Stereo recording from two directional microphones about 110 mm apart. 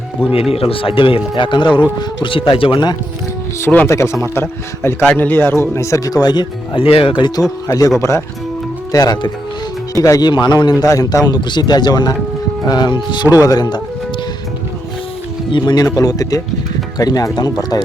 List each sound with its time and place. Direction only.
0.5 s speech: 60° left (ahead or behind)
3.6 s speech: 15° left (ahead or behind)
3.8 s speech: 25° left (ahead or behind); by 6.8 s 40° left (ahead or behind)
6.8 s speech: 55° left (ahead or behind)
7.7 s speech: 30° left (ahead or behind)
15.5 s speech: 40° left (ahead or behind)